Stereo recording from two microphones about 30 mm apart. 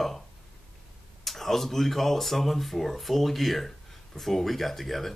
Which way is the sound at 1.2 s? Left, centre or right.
Centre.